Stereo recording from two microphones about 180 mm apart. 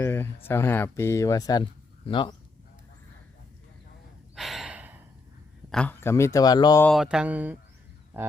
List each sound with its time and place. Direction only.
0.0 s a sound: 15° left (ahead or behind)
0.4 s speech: 15° left (ahead or behind)
4.4 s gasp: centre (ahead or behind)
5.7 s speech: 10° left (ahead or behind)
6.8 s mantra: centre (ahead or behind)